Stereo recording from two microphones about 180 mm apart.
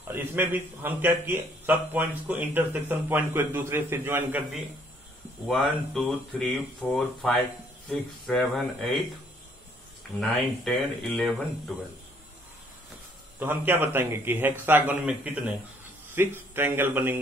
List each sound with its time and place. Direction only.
0.1 s a man's voice: 10° right (ahead or behind)
5.5 s speech: centre (ahead or behind)
10.3 s speech: centre (ahead or behind)
13.4 s a man's voice: 10° right (ahead or behind)